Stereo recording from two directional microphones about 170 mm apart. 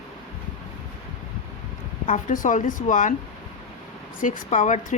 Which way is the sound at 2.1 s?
50° left (ahead or behind).